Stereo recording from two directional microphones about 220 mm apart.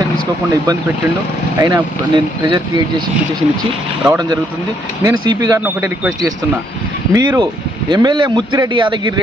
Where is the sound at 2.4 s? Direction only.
20° right (ahead or behind).